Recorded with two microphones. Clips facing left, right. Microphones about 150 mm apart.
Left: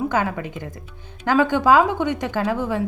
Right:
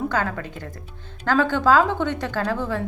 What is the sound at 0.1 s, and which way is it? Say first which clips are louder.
A woman's voice: left 2 dB; 15° left (ahead or behind).